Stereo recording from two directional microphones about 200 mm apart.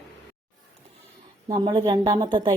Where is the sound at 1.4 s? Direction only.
20° right (ahead or behind).